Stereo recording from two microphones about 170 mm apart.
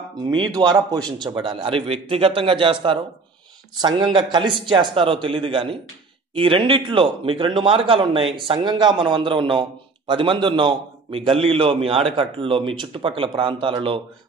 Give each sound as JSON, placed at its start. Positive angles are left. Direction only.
{"t": 0.3, "sound": "a man's voice", "side_deg": -25}